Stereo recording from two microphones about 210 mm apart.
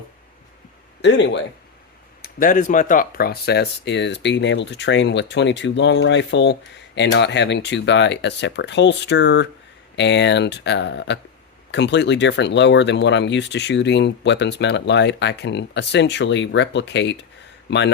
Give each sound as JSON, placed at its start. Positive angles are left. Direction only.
{"t": 1.0, "sound": "speech", "side_deg": 55}
{"t": 2.2, "sound": "speech", "side_deg": 40}